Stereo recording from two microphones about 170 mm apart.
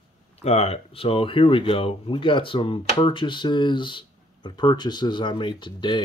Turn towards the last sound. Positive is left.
turn(degrees=25)  # may be behind; listen again after turning